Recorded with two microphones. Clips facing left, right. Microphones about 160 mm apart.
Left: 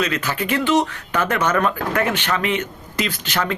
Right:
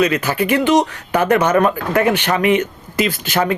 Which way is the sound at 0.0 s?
10° right (ahead or behind).